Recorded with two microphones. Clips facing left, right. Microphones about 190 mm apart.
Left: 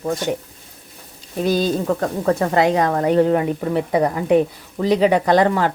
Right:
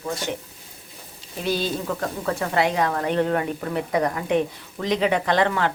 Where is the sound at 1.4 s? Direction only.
45° left (ahead or behind).